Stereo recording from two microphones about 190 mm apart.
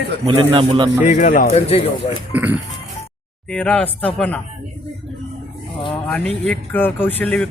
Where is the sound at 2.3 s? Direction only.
10° right (ahead or behind).